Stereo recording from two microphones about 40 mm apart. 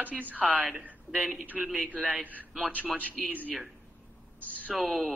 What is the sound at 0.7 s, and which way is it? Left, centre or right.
Speech, right.